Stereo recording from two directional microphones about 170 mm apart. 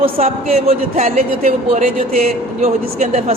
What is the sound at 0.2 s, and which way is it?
Speech, 35° right (ahead or behind).